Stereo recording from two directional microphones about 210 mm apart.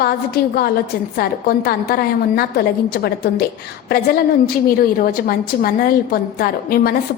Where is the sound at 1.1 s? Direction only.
45° left (ahead or behind).